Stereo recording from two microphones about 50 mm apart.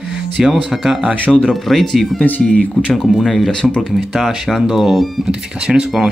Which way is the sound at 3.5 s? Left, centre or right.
Centre.